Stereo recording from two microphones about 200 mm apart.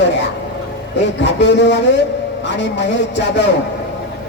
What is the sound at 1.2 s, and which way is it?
Speech, 60° left (ahead or behind).